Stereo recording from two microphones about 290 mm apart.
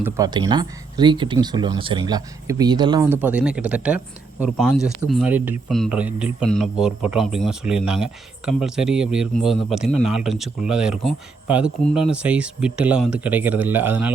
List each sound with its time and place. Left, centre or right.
0.0 s speech: centre